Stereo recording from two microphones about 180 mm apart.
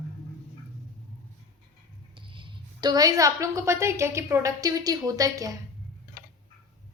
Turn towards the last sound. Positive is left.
turn(degrees=-20)  # may be behind; listen again after turning